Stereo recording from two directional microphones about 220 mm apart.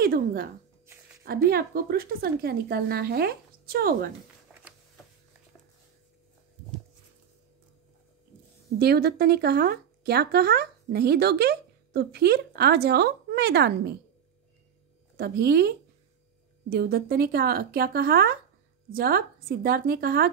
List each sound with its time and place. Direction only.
0.0 s speech: 40° right (ahead or behind)
8.7 s speech: 45° right (ahead or behind)
15.1 s speech: 45° right (ahead or behind)